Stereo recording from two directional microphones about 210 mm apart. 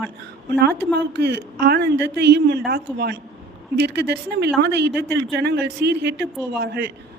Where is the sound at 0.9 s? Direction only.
55° right (ahead or behind).